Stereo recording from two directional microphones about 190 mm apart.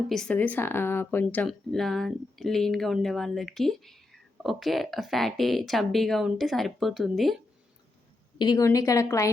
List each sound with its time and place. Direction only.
0.1 s speech: 5° left (ahead or behind)
8.4 s a woman's voice: 20° left (ahead or behind)